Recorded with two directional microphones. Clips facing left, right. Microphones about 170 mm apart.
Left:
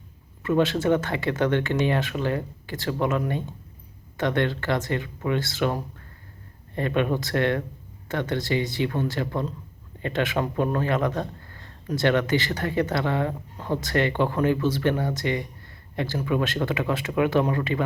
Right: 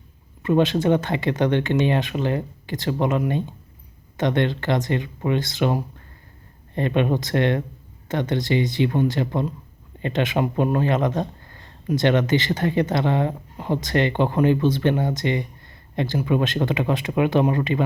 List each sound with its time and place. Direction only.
0.4 s speech: 20° right (ahead or behind)